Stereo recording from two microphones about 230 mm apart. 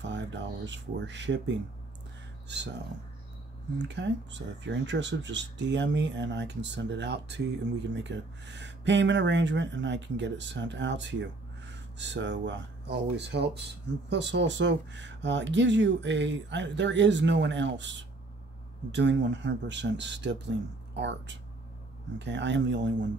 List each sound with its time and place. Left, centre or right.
0.0 s speech: right
2.4 s speech: right